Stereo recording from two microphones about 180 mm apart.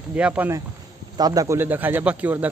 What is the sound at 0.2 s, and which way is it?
Speech, 10° right (ahead or behind).